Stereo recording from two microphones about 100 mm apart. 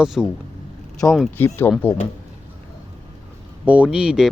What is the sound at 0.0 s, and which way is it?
Speech, 5° right (ahead or behind).